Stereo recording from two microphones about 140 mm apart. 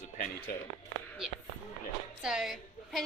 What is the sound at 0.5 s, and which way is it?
Speech, 90° left.